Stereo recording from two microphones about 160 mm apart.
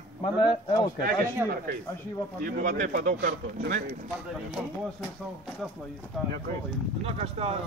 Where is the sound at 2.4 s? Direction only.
60° right (ahead or behind).